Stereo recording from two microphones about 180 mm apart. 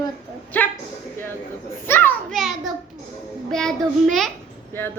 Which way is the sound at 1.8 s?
10° left (ahead or behind).